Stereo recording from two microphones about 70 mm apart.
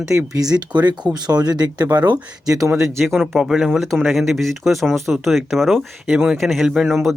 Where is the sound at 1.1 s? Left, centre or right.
Right.